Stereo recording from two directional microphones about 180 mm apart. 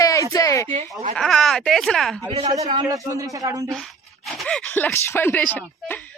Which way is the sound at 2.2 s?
30° right (ahead or behind).